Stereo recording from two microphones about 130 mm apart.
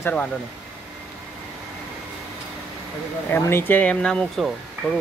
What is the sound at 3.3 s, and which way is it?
Speech, 20° left (ahead or behind).